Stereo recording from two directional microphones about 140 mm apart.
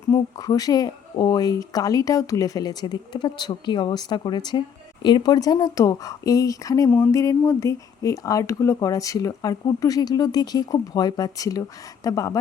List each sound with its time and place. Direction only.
0.1 s speech: 25° left (ahead or behind)